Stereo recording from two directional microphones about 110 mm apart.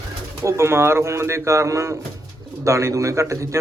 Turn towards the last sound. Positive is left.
turn(degrees=-30)  # may be behind; listen again after turning